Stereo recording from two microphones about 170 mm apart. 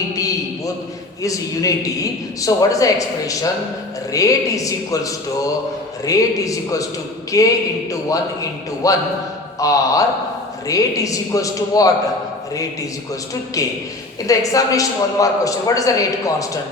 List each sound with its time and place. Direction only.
0.2 s a sound: 20° left (ahead or behind)
1.2 s a man's voice: 20° left (ahead or behind)
13.6 s a man's voice: 20° left (ahead or behind)